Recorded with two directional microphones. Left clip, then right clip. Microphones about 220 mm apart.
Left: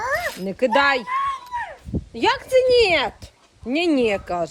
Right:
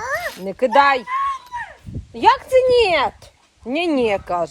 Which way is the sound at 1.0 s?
10° left (ahead or behind).